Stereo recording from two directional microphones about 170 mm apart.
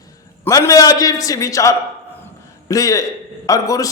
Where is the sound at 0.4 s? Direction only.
20° left (ahead or behind).